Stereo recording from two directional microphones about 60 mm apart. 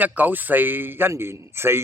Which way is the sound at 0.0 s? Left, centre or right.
Right.